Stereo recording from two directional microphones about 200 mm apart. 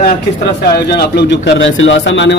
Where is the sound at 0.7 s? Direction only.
55° left (ahead or behind).